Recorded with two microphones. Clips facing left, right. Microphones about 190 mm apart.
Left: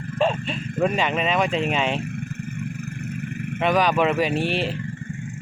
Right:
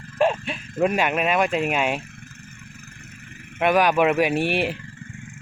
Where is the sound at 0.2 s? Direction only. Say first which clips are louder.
Right 1 dB; 10° right (ahead or behind).